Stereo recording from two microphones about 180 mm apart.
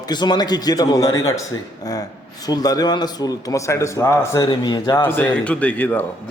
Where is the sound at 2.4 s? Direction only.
20° left (ahead or behind).